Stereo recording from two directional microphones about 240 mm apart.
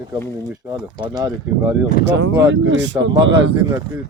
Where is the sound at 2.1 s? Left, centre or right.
Right.